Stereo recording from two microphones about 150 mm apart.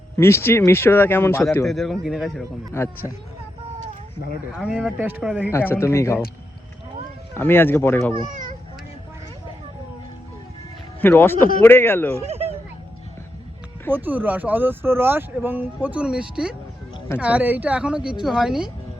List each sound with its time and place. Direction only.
0.2 s speech: 15° left (ahead or behind)
1.6 s speech: centre (ahead or behind)
2.7 s speech: 15° left (ahead or behind)
4.5 s speech: 5° right (ahead or behind)
5.5 s speech: 15° left (ahead or behind)
7.3 s speech: 15° left (ahead or behind)
11.0 s speech: 15° left (ahead or behind)
12.2 s speech: 45° right (ahead or behind)
13.9 s speech: 10° right (ahead or behind)